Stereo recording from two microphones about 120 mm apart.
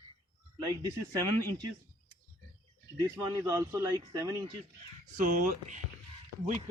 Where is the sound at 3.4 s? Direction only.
25° right (ahead or behind).